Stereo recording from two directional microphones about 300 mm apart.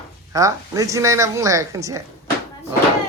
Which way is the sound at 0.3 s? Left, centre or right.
Centre.